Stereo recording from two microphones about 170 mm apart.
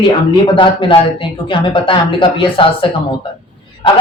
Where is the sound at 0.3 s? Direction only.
30° left (ahead or behind).